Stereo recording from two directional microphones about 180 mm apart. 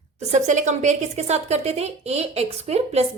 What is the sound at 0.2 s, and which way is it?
A woman's voice, 40° right (ahead or behind).